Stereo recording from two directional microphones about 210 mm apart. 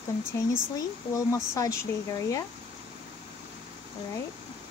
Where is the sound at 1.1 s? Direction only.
15° left (ahead or behind).